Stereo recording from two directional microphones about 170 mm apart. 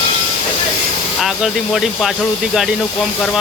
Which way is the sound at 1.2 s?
Centre (ahead or behind).